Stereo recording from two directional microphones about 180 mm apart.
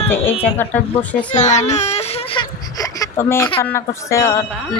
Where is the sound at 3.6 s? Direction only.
15° left (ahead or behind).